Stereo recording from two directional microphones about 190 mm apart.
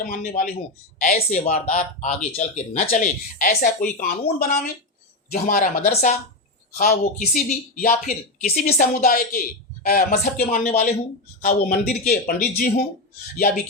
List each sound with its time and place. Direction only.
0.0 s speech: 45° left (ahead or behind)
5.3 s speech: 45° left (ahead or behind)
6.7 s speech: 50° left (ahead or behind)